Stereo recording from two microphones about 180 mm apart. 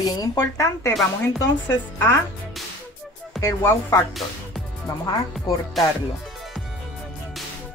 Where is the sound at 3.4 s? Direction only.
15° left (ahead or behind).